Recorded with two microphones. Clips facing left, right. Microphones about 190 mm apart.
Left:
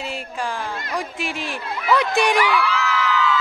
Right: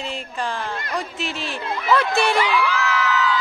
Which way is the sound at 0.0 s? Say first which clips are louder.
Even; 10° left (ahead or behind).